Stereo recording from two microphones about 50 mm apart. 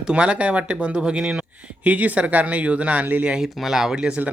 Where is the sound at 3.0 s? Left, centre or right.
Right.